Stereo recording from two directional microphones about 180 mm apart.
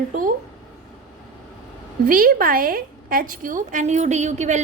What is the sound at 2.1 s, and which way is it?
A woman's voice, 50° right (ahead or behind).